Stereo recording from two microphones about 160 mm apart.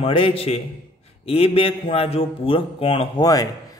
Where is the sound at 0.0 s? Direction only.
35° left (ahead or behind).